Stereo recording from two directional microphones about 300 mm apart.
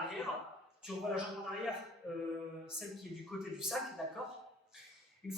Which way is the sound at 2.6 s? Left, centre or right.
Centre.